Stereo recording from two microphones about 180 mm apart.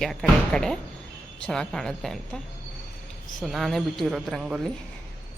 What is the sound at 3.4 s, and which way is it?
Speech, centre (ahead or behind).